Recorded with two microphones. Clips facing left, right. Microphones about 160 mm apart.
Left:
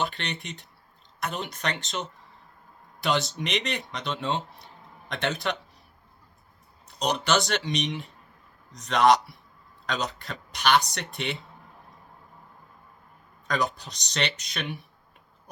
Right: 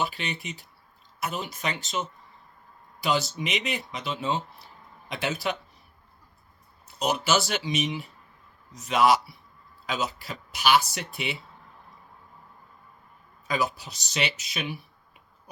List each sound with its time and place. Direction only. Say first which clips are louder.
0.0 s speech: even; 5° right (ahead or behind)
6.8 s speech: even; 5° right (ahead or behind)
13.5 s speech: even; 5° right (ahead or behind)